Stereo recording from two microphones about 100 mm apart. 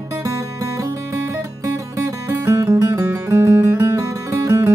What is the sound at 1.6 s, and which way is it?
Music, 30° right (ahead or behind).